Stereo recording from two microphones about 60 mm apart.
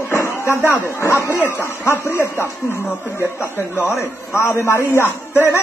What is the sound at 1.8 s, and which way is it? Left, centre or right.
Speech, left.